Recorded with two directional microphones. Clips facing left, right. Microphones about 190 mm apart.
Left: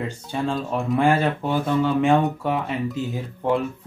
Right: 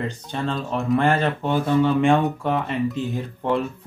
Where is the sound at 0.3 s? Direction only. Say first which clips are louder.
Left 2 dB; 10° left (ahead or behind).